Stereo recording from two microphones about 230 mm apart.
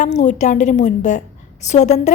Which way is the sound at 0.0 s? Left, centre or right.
Left.